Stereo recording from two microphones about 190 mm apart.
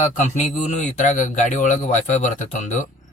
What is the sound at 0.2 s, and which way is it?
Speech, 40° left (ahead or behind).